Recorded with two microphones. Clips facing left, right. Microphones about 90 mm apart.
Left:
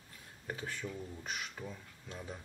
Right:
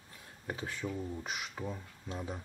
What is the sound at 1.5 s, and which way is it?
Speech, 35° right (ahead or behind).